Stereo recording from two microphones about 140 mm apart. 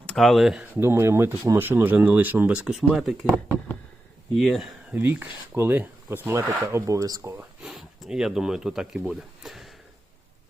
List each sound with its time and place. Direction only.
0.0 s speech: 5° left (ahead or behind)
0.8 s speech: 20° right (ahead or behind); by 3.2 s centre (ahead or behind)
4.4 s speech: centre (ahead or behind)
4.9 s speech: 15° right (ahead or behind)
7.3 s speech: centre (ahead or behind)